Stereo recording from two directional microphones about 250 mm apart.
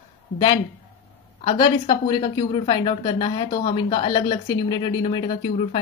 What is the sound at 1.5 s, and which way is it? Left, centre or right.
A woman's voice, centre.